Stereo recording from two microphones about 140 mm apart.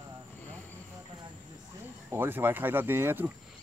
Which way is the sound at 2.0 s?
15° right (ahead or behind).